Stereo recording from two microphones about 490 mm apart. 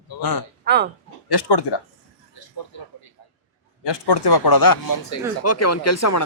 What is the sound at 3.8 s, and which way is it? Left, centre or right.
Speech, left.